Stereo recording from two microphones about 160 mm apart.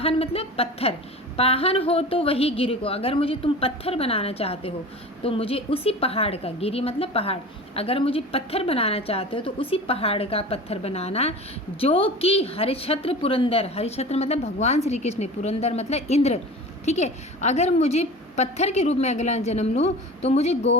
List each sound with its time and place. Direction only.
0.0 s a woman's voice: 35° left (ahead or behind)